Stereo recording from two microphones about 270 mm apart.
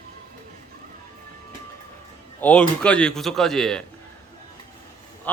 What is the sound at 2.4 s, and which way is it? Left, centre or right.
A man's voice, centre.